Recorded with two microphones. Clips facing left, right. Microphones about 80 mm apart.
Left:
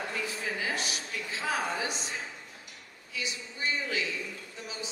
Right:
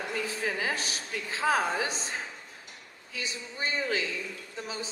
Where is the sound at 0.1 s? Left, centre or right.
Right.